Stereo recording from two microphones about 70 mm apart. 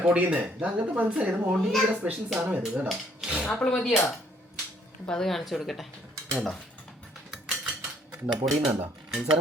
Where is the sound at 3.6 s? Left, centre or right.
Centre.